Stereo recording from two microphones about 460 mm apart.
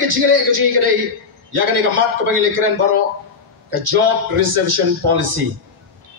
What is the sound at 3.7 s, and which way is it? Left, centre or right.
Speech, right.